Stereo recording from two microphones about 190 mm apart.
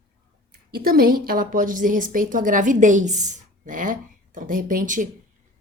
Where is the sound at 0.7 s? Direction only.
50° right (ahead or behind).